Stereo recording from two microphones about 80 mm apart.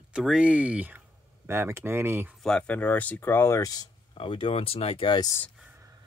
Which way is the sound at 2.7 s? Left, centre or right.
Centre.